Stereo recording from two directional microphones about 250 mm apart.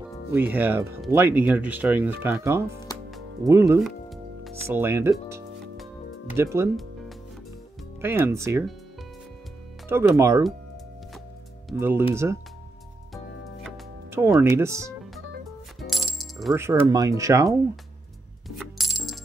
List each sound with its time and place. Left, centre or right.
0.3 s speech: centre
3.8 s speech: centre
8.0 s speech: centre
9.8 s speech: centre
11.7 s speech: centre
14.1 s speech: centre
15.9 s coin: centre
18.6 s coin: centre